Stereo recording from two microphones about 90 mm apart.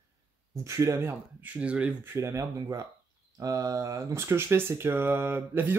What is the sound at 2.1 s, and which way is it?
Speech, 35° right (ahead or behind).